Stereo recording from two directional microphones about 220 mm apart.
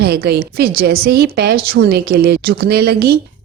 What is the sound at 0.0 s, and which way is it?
A woman's voice, 45° right (ahead or behind).